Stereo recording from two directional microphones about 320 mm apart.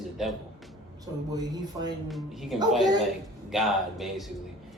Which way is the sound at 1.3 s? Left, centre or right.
Centre.